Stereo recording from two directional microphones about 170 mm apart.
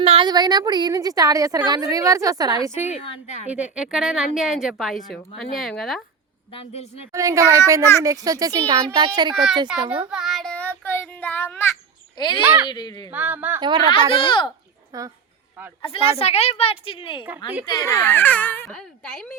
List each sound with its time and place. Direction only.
0.0 s a woman's voice: 35° right (ahead or behind)
3.5 s a woman's voice: 5° right (ahead or behind)
6.5 s a woman's voice: 35° left (ahead or behind)
7.1 s a woman's voice: 20° right (ahead or behind)
9.3 s a woman's voice: centre (ahead or behind)
10.1 s child singing: centre (ahead or behind); by 11.7 s 15° left (ahead or behind)
12.1 s a child's voice: 25° left (ahead or behind)
13.1 s speech: 10° right (ahead or behind)
13.6 s a woman's voice: 25° right (ahead or behind)
14.1 s a child's voice: 30° left (ahead or behind)
14.9 s a woman's voice: 20° right (ahead or behind)
15.8 s a woman's voice: 35° left (ahead or behind)
17.2 s speech: 10° right (ahead or behind)
17.7 s a woman's voice: 20° left (ahead or behind); by 19.3 s 5° left (ahead or behind)